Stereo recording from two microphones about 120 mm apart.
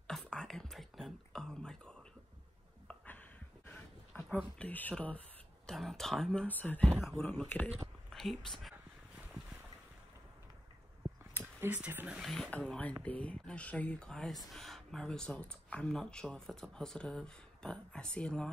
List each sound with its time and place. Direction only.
0.0 s whispering: 5° left (ahead or behind)
4.1 s a sound: 5° left (ahead or behind)
4.6 s speech: 15° left (ahead or behind)
11.3 s speech: 15° right (ahead or behind)
12.2 s speech: centre (ahead or behind)